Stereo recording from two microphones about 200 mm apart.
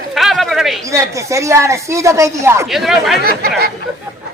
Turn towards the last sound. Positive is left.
turn(degrees=-50)  # may be behind; listen again after turning